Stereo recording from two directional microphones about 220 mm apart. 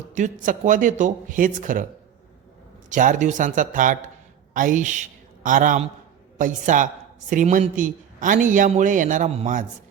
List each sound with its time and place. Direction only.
0.1 s a man's voice: 35° right (ahead or behind)
2.9 s a man's voice: 35° right (ahead or behind)